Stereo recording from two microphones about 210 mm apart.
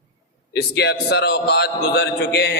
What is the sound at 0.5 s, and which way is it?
A man's voice, 55° left (ahead or behind).